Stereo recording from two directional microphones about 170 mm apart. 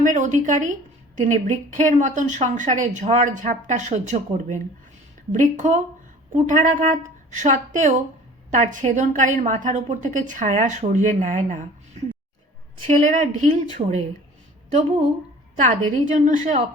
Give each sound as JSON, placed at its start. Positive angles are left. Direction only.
{"t": 0.0, "sound": "speech", "side_deg": -45}
{"t": 12.9, "sound": "speech", "side_deg": -45}
{"t": 13.8, "sound": "speech", "side_deg": -30}
{"t": 14.7, "sound": "speech", "side_deg": -45}